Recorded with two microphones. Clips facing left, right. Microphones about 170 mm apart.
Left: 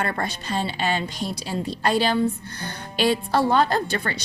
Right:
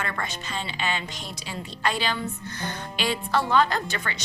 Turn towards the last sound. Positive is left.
turn(degrees=35)  # may be behind; listen again after turning